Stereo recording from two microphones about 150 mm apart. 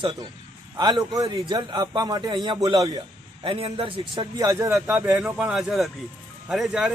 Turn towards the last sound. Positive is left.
turn(degrees=-5)  # may be behind; listen again after turning